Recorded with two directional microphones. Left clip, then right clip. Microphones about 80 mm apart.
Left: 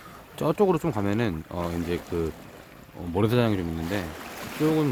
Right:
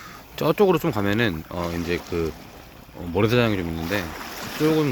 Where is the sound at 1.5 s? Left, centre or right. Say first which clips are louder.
Right 3 dB; centre.